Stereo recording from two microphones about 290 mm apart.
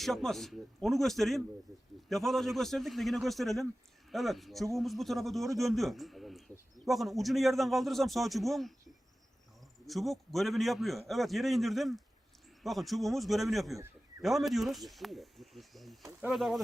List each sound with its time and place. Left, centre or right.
0.0 s a man's voice: centre
9.8 s a man's voice: centre